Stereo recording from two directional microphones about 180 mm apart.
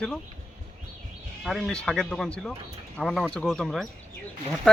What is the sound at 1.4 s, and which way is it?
Speech, centre (ahead or behind).